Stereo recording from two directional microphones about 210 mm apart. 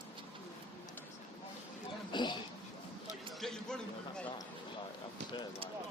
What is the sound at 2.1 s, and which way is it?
Speech, 20° left (ahead or behind).